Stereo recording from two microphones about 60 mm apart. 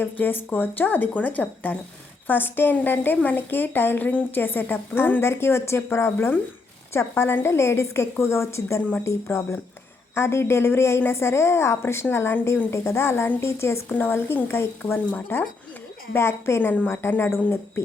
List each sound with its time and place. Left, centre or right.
0.0 s a woman's voice: left
5.2 s a woman's voice: left
13.8 s a woman's voice: left